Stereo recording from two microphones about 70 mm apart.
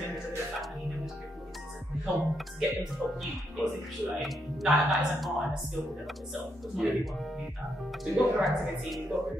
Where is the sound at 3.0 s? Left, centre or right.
Right.